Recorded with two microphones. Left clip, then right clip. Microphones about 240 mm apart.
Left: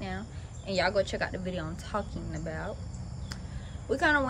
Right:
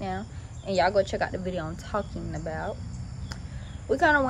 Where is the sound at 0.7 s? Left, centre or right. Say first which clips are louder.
Right 4 dB; centre.